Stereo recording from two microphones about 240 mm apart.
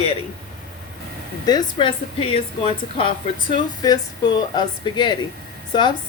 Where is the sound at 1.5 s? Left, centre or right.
Centre.